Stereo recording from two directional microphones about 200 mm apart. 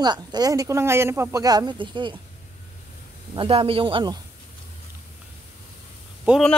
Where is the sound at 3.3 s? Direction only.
25° right (ahead or behind).